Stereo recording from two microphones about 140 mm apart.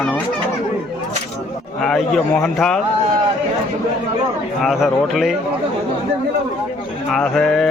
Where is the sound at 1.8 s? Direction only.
5° left (ahead or behind).